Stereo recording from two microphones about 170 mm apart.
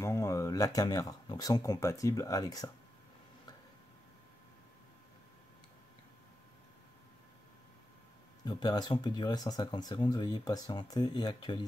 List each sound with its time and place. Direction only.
0.0 s speech: 15° left (ahead or behind)
8.5 s speech: 25° left (ahead or behind)